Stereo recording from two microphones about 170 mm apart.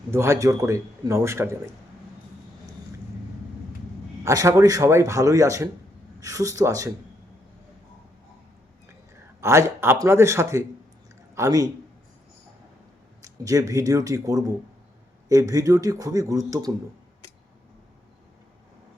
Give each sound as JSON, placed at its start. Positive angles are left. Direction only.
{"t": 0.1, "sound": "a man's voice", "side_deg": -15}
{"t": 4.2, "sound": "a man's voice", "side_deg": -15}
{"t": 9.4, "sound": "a man's voice", "side_deg": -15}
{"t": 13.2, "sound": "speech", "side_deg": -20}